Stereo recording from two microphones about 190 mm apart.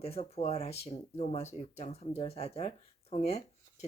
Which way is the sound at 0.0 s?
35° left (ahead or behind).